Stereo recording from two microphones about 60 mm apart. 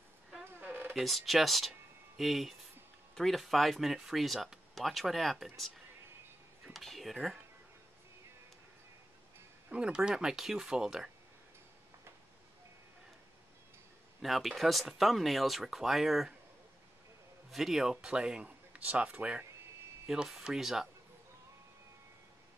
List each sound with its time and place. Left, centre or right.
0.4 s a sound: right
0.9 s speech: centre
6.6 s a sound: centre
9.7 s speech: centre
14.2 s speech: centre
17.5 s a man's voice: centre; by 19.4 s right
20.1 s speech: centre